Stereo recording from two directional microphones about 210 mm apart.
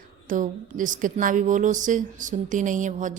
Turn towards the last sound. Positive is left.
turn(degrees=-35)  # may be behind; listen again after turning